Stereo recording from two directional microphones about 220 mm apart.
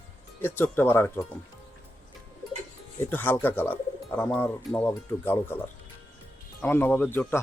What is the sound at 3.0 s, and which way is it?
Speech, 10° left (ahead or behind).